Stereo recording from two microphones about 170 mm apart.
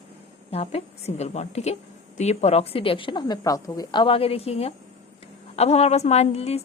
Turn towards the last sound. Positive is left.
turn(degrees=40)  # may be behind; listen again after turning